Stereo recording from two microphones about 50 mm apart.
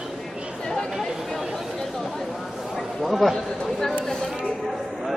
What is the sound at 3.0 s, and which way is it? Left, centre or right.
Speech, centre.